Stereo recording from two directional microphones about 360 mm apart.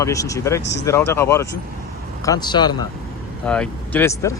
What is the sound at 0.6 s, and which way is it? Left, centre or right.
Speech, left.